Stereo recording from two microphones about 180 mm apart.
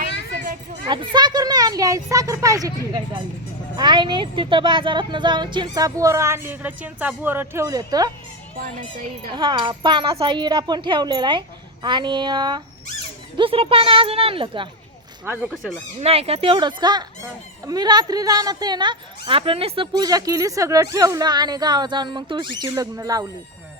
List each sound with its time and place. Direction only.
0.9 s a sound: 25° right (ahead or behind)
3.8 s a woman's voice: 25° right (ahead or behind)
8.5 s speech: 55° right (ahead or behind)
9.3 s a woman's voice: 25° right (ahead or behind)
15.2 s speech: 10° right (ahead or behind)
15.4 s speech: 5° left (ahead or behind)
16.0 s a woman's voice: 35° right (ahead or behind); by 23.3 s 20° right (ahead or behind)